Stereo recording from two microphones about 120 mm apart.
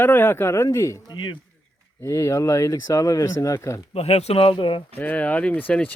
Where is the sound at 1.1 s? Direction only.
40° left (ahead or behind).